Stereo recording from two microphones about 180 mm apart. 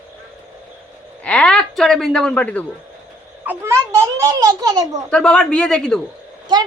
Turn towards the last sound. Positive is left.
turn(degrees=-25)  # may be behind; listen again after turning